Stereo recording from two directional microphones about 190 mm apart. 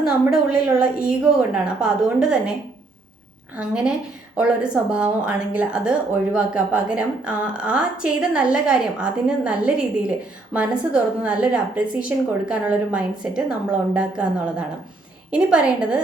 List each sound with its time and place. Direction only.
0.3 s a woman's voice: 5° right (ahead or behind)
3.5 s a woman's voice: 5° right (ahead or behind)
15.3 s a woman's voice: 5° right (ahead or behind)